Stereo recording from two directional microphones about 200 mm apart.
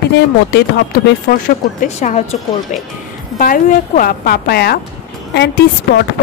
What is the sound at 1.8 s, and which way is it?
Speech, 35° left (ahead or behind).